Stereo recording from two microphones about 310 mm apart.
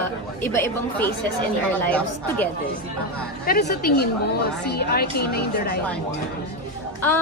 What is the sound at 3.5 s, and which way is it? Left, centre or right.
A woman's voice, left.